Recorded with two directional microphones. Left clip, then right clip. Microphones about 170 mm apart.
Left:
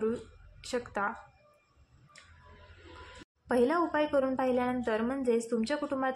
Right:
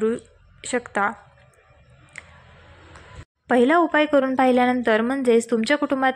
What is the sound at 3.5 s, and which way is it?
A woman's voice, 35° right (ahead or behind).